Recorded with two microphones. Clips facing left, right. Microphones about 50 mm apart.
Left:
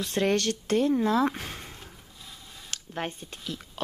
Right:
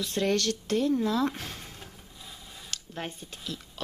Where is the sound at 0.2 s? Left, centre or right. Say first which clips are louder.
Left 2 dB; left.